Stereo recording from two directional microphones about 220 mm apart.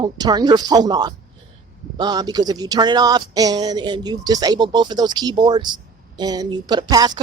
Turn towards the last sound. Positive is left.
turn(degrees=-20)  # may be behind; listen again after turning